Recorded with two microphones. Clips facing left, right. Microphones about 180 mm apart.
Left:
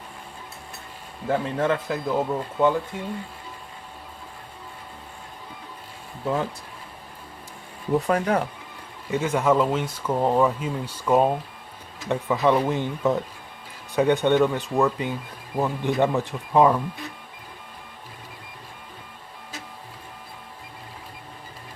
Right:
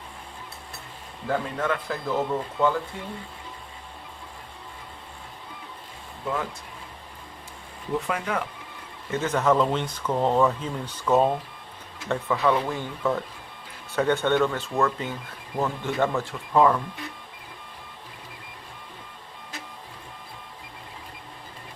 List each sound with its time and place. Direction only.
1.3 s speech: 25° left (ahead or behind)
6.2 s speech: 30° left (ahead or behind)
8.0 s speech: 40° left (ahead or behind)
9.0 s speech: 10° left (ahead or behind)